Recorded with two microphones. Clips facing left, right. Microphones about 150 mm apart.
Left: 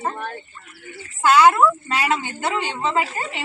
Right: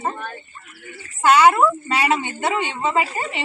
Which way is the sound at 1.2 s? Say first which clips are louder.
Even; centre (ahead or behind).